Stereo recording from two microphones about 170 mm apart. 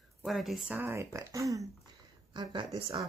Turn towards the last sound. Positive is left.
turn(degrees=-25)  # may be behind; listen again after turning